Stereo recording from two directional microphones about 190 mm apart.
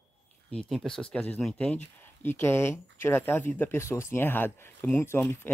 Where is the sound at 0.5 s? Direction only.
5° left (ahead or behind).